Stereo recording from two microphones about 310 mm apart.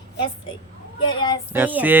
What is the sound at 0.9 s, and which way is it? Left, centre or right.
Speech, centre.